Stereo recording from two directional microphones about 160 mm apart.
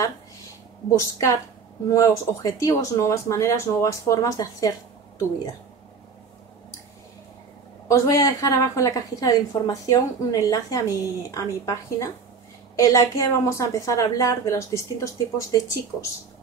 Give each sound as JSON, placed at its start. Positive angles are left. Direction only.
{"t": 0.9, "sound": "a woman's voice", "side_deg": 20}
{"t": 7.9, "sound": "a woman's voice", "side_deg": 20}